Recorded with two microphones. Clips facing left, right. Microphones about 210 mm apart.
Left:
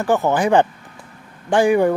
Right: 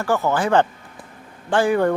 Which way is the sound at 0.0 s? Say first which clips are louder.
Left 3 dB; 20° left (ahead or behind).